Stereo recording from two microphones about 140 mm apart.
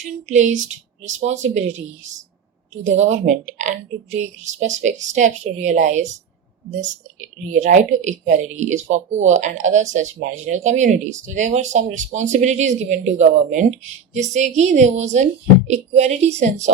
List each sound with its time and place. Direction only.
0.0 s speech: 60° right (ahead or behind)
2.8 s speech: 55° right (ahead or behind)
7.5 s speech: 60° right (ahead or behind)